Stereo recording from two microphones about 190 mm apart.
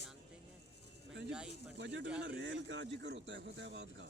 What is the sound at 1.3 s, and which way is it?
Speech, 5° right (ahead or behind).